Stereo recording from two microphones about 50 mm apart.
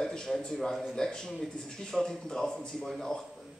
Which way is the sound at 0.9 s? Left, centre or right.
Centre.